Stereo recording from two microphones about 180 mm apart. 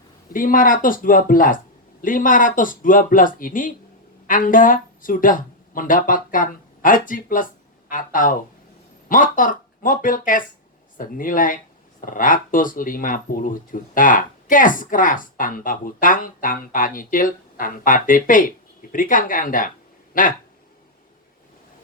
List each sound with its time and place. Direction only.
0.3 s speech: 50° left (ahead or behind)